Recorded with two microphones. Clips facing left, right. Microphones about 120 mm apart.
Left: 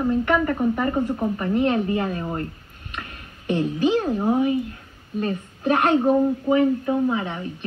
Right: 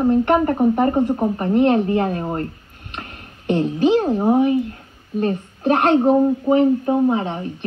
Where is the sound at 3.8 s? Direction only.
25° right (ahead or behind).